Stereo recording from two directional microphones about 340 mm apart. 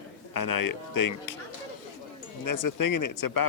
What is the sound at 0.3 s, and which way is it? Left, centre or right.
Speech, left.